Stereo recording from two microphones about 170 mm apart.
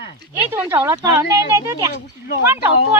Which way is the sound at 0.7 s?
20° right (ahead or behind).